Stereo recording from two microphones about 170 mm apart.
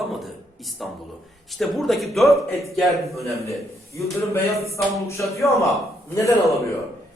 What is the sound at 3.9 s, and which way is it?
A man's voice, 20° left (ahead or behind).